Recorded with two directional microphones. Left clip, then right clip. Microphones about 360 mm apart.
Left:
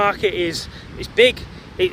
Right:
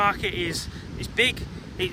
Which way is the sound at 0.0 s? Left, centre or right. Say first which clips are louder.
Left 5 dB; centre.